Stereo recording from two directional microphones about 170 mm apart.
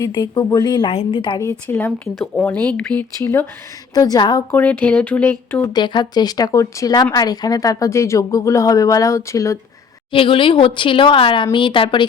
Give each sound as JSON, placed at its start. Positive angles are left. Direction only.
{"t": 0.0, "sound": "a woman's voice", "side_deg": 25}
{"t": 1.6, "sound": "a woman's voice", "side_deg": 10}
{"t": 4.5, "sound": "speech", "side_deg": 10}
{"t": 5.7, "sound": "a woman's voice", "side_deg": 25}
{"t": 10.1, "sound": "a woman's voice", "side_deg": 30}